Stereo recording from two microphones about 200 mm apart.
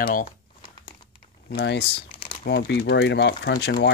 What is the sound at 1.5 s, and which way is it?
Speech, 55° left (ahead or behind).